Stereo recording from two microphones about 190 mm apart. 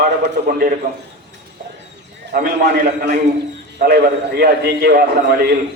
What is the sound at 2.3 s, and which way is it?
A man's voice, 50° right (ahead or behind).